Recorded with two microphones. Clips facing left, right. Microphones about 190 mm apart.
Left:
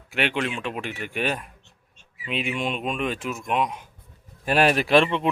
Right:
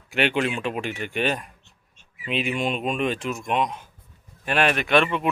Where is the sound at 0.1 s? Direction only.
Centre (ahead or behind).